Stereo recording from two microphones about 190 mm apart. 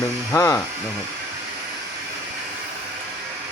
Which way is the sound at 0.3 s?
15° left (ahead or behind).